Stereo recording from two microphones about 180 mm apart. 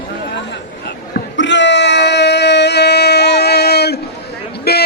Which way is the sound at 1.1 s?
80° left.